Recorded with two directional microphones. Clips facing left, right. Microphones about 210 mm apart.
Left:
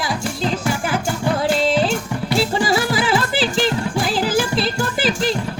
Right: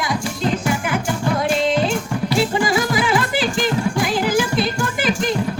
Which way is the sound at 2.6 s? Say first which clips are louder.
Even; 30° left (ahead or behind).